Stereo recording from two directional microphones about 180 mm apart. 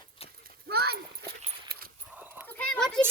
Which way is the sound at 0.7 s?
60° right (ahead or behind).